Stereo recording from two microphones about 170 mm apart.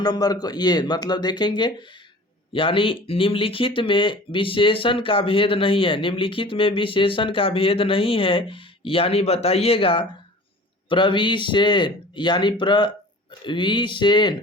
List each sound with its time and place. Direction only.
0.0 s speech: 25° left (ahead or behind)